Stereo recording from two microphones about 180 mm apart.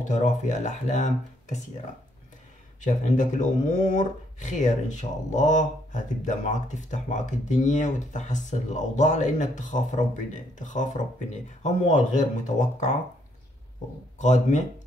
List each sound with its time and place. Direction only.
0.0 s speech: 40° left (ahead or behind)
2.8 s speech: 45° left (ahead or behind)
14.1 s speech: 40° left (ahead or behind)